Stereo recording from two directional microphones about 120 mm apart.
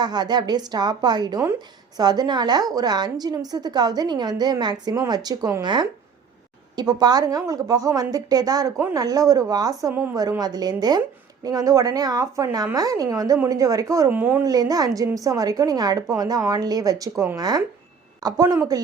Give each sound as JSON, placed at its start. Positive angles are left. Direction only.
{"t": 0.0, "sound": "a woman's voice", "side_deg": -35}
{"t": 9.9, "sound": "speech", "side_deg": -15}
{"t": 10.2, "sound": "a woman's voice", "side_deg": -30}
{"t": 14.1, "sound": "speech", "side_deg": -15}
{"t": 14.4, "sound": "a woman's voice", "side_deg": -30}